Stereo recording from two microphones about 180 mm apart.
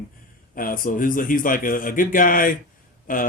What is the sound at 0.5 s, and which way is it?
Speech, 50° left (ahead or behind).